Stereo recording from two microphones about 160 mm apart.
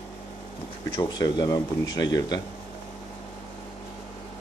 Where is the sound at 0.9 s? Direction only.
25° left (ahead or behind).